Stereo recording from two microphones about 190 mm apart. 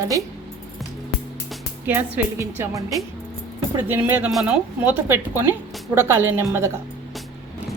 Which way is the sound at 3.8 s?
10° right (ahead or behind).